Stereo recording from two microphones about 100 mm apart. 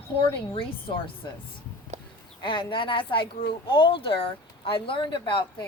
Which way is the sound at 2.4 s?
55° left (ahead or behind).